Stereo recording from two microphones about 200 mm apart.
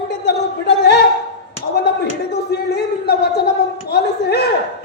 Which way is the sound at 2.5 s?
55° left (ahead or behind).